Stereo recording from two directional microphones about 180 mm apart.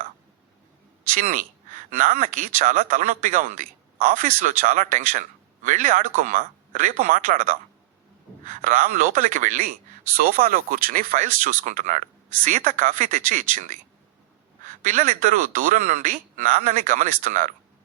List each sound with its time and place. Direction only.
1.1 s a man's voice: 45° right (ahead or behind)